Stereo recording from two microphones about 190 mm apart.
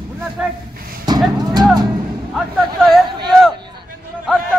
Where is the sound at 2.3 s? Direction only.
Centre (ahead or behind).